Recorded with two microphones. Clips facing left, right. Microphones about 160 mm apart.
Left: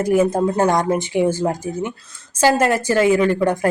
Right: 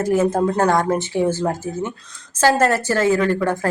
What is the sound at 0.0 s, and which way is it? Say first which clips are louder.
A woman's voice: left 1 dB; 10° left (ahead or behind).